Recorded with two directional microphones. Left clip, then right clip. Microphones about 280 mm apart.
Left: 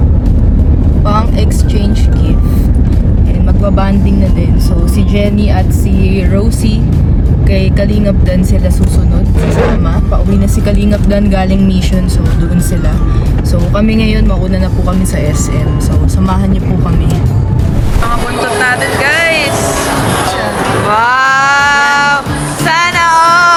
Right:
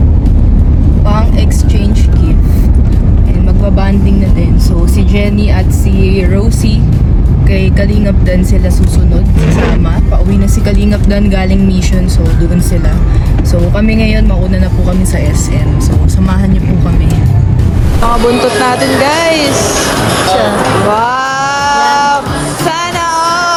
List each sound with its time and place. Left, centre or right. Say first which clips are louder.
4.9 s music: left 2 dB; centre
6.0 s speech: right 2 dB; centre
7.5 s speech: even; centre
10.4 s speech: even; centre
13.7 s speech: left 2 dB; centre
18.6 s speech: right 1 dB; centre
19.5 s music: right 2 dB; centre
20.9 s music: left 3 dB; centre